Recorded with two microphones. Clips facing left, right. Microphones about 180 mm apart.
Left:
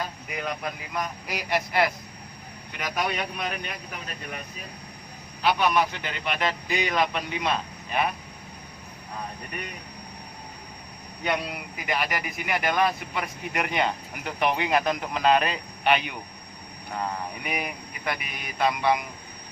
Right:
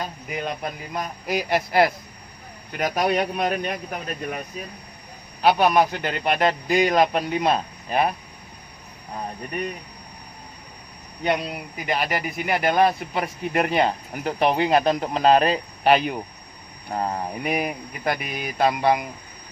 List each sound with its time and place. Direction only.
0.4 s a man's voice: 35° right (ahead or behind)
11.3 s speech: 30° right (ahead or behind)